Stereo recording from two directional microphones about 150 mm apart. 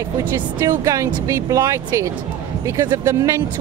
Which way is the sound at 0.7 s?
20° right (ahead or behind).